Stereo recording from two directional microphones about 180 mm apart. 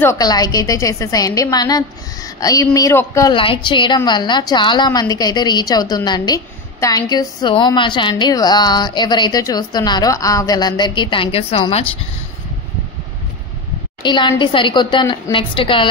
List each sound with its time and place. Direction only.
0.0 s a woman's voice: 20° left (ahead or behind)
3.3 s a woman's voice: 30° left (ahead or behind)
14.0 s a woman's voice: 25° left (ahead or behind)